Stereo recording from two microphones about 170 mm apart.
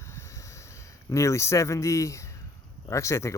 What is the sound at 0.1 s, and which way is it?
Snort, 15° left (ahead or behind).